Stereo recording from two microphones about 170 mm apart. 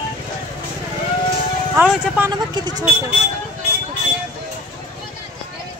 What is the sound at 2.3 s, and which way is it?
Speech, 25° right (ahead or behind).